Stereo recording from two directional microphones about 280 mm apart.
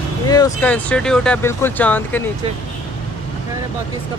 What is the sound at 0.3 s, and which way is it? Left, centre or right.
Speech, centre.